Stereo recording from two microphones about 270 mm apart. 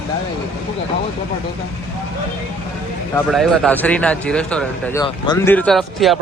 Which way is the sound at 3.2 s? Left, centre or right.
Centre.